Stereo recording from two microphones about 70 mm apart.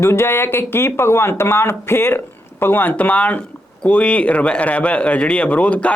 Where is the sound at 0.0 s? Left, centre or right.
Left.